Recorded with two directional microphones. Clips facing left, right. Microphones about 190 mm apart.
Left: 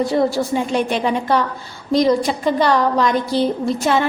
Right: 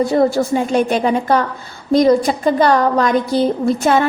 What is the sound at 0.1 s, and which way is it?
A woman's voice, 50° right (ahead or behind).